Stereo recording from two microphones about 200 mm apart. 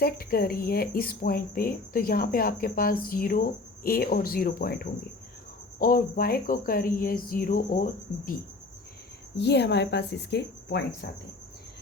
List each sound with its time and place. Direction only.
0.0 s speech: 50° left (ahead or behind)
9.4 s speech: 55° left (ahead or behind)